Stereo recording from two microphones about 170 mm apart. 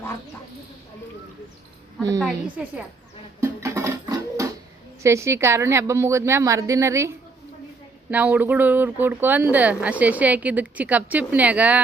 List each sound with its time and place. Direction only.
2.2 s speech: 5° right (ahead or behind)
3.4 s music: 15° right (ahead or behind)
5.0 s speech: 15° right (ahead or behind)
8.1 s speech: 10° right (ahead or behind)